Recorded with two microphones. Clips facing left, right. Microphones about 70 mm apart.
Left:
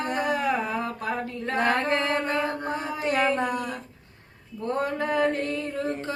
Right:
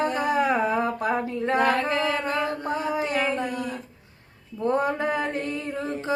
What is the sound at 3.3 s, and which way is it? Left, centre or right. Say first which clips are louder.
Speech: left 1 dB; left.